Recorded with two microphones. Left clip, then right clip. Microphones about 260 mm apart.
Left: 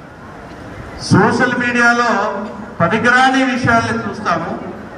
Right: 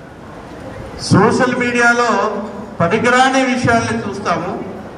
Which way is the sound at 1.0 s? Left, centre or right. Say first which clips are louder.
Even; centre.